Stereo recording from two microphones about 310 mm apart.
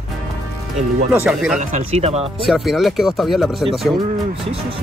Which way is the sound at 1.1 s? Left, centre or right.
Centre.